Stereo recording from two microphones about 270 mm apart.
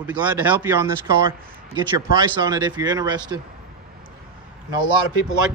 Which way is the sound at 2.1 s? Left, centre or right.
Centre.